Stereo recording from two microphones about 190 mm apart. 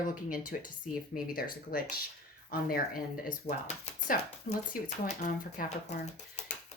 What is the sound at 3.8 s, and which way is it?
Speech, 40° left (ahead or behind).